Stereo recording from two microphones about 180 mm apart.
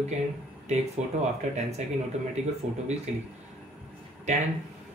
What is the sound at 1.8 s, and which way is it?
Speech, 40° right (ahead or behind).